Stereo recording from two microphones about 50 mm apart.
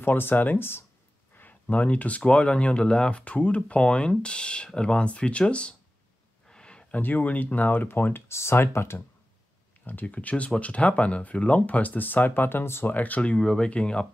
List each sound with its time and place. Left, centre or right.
0.0 s speech: left
1.4 s speech: left
6.5 s a sound: centre
6.9 s speech: left
8.4 s speech: left
9.8 s speech: left
12.8 s speech: left
13.4 s speech: centre